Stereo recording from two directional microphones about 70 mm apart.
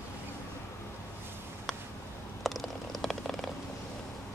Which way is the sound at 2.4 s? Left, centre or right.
Centre.